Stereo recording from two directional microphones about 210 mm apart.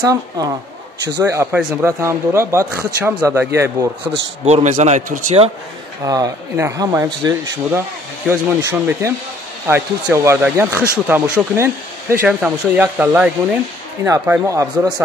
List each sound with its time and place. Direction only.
1.0 s speech: 15° right (ahead or behind)
4.0 s a man's voice: 30° right (ahead or behind)
6.0 s speech: 15° right (ahead or behind)